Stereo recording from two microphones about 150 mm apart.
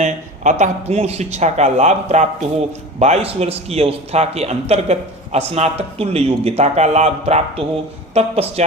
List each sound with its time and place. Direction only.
0.0 s a man's voice: 50° right (ahead or behind)